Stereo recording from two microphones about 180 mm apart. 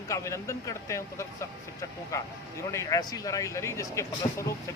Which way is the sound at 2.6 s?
20° left (ahead or behind).